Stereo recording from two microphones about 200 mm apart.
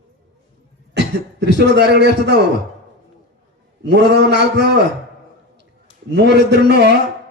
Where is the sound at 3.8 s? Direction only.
60° right (ahead or behind).